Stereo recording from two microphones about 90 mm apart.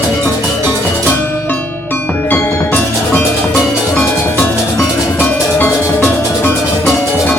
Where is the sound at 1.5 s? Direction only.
20° left (ahead or behind).